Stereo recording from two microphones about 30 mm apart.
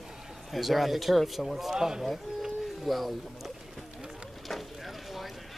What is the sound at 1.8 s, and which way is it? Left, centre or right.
Speech, centre.